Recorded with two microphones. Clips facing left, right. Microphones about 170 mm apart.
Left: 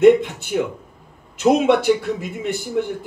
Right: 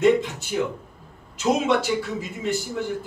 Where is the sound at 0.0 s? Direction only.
55° left (ahead or behind).